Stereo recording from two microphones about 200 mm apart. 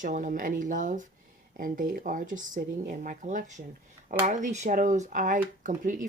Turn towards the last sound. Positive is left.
turn(degrees=-40)  # may be behind; listen again after turning